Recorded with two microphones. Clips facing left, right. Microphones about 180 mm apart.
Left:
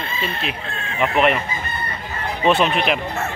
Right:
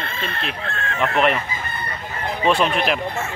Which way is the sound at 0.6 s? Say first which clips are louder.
Right 2 dB; 60° right (ahead or behind).